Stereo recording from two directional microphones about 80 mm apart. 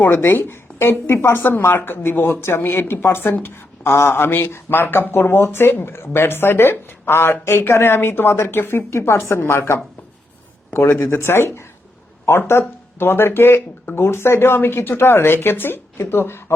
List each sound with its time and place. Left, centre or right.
0.0 s speech: left